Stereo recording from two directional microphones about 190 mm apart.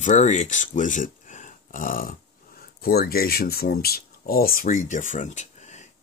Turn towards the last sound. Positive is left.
turn(degrees=40)  # may be behind; listen again after turning